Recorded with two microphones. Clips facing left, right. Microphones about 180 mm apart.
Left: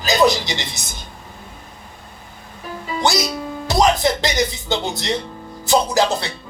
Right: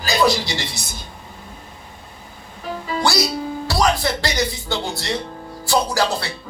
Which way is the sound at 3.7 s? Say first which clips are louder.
Left 4 dB; 20° left (ahead or behind).